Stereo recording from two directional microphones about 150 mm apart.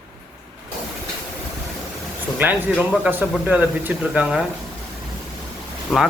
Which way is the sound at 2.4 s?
10° right (ahead or behind).